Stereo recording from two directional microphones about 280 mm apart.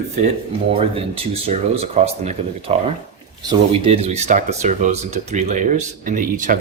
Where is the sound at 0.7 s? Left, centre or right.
Centre.